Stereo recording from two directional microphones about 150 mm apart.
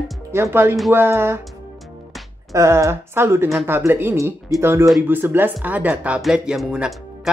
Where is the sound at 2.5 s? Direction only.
20° right (ahead or behind).